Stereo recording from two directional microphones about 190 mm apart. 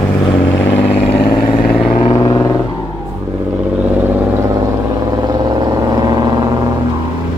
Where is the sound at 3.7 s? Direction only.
10° right (ahead or behind).